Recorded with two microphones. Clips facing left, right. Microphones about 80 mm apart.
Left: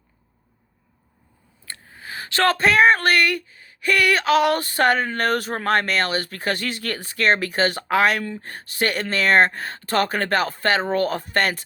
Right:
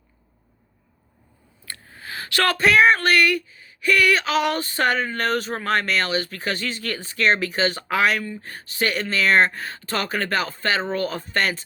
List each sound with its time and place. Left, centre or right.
1.6 s speech: centre; by 11.6 s left